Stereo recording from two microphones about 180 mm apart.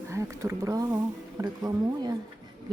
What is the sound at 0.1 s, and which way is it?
A woman's voice, 15° right (ahead or behind).